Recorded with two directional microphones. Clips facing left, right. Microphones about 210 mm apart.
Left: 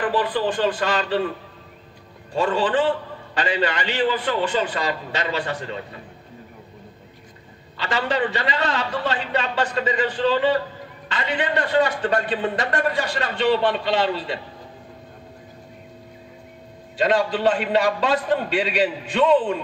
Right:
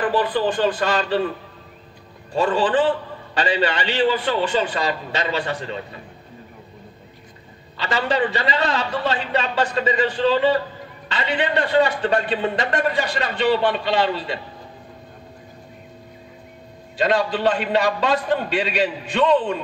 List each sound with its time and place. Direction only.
0.0 s a man's voice: 40° right (ahead or behind)
2.3 s a man's voice: 35° right (ahead or behind)
7.7 s a man's voice: 35° right (ahead or behind); by 14.4 s centre (ahead or behind)
16.9 s a man's voice: centre (ahead or behind)